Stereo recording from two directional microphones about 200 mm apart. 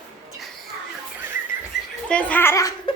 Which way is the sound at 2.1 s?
10° left (ahead or behind).